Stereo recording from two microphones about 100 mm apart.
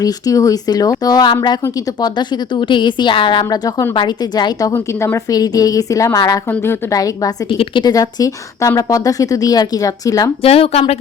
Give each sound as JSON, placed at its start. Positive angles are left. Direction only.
{"t": 0.0, "sound": "a woman's voice", "side_deg": 35}
{"t": 4.7, "sound": "a woman's voice", "side_deg": 25}
{"t": 5.3, "sound": "a woman's voice", "side_deg": 40}
{"t": 6.5, "sound": "a woman's voice", "side_deg": 25}
{"t": 6.9, "sound": "a woman's voice", "side_deg": 35}
{"t": 7.6, "sound": "a woman's voice", "side_deg": 50}
{"t": 10.4, "sound": "speech", "side_deg": 85}